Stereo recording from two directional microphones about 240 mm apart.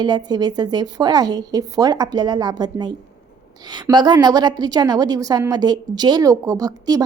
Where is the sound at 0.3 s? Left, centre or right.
Centre.